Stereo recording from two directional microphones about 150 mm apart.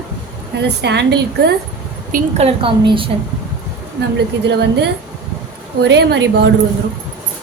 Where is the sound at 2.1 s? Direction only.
60° right (ahead or behind).